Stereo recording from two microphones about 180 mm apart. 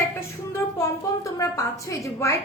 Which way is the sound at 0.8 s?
20° left (ahead or behind).